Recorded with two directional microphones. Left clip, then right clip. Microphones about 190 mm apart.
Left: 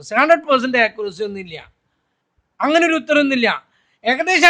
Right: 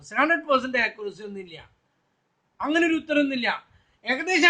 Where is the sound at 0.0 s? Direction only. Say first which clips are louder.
Left 9 dB; 55° left (ahead or behind).